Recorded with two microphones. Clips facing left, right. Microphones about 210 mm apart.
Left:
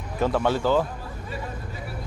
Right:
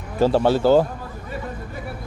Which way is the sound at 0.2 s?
30° right (ahead or behind).